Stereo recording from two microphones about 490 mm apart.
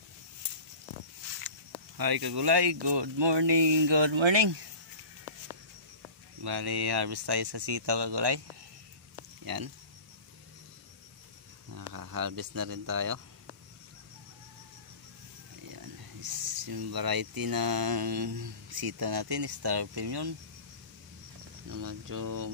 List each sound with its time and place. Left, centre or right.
2.0 s speech: right
6.4 s speech: right
9.4 s speech: right
11.7 s speech: right
15.7 s speech: right
21.6 s speech: right